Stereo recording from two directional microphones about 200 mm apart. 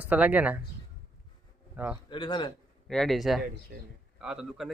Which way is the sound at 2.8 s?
Centre (ahead or behind).